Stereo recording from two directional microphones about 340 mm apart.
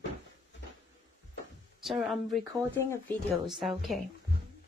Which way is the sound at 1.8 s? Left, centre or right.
Centre.